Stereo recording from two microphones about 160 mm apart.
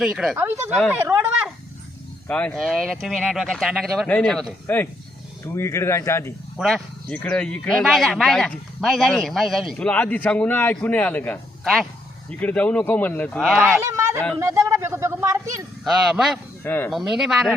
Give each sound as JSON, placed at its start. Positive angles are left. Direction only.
{"t": 0.0, "sound": "speech", "side_deg": -5}
{"t": 0.9, "sound": "a sound", "side_deg": -15}
{"t": 2.2, "sound": "speech", "side_deg": 5}
{"t": 4.6, "sound": "speech", "side_deg": 10}
{"t": 6.6, "sound": "speech", "side_deg": 0}
{"t": 11.6, "sound": "speech", "side_deg": 0}
{"t": 13.7, "sound": "speech", "side_deg": -15}
{"t": 15.8, "sound": "speech", "side_deg": -5}
{"t": 16.6, "sound": "speech", "side_deg": 10}
{"t": 17.1, "sound": "speech", "side_deg": -5}